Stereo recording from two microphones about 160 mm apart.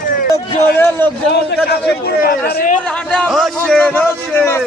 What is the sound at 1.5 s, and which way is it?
A man's voice, 85° left.